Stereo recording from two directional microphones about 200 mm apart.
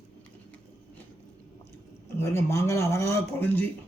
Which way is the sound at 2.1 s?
15° left (ahead or behind).